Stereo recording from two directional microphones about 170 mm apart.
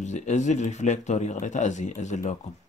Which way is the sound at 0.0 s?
45° left (ahead or behind).